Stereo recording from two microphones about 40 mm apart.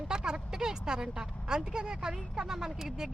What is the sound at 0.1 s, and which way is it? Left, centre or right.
Vehicle, centre.